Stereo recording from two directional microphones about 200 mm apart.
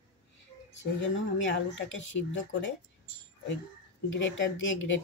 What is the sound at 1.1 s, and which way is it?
Speech, 70° left (ahead or behind).